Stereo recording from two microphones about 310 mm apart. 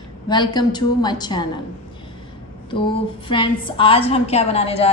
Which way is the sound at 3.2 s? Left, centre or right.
Centre.